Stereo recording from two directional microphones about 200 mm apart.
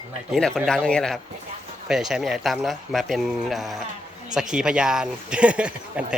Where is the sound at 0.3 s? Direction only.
Centre (ahead or behind).